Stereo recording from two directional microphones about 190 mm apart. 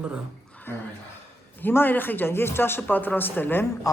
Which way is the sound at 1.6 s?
10° left (ahead or behind).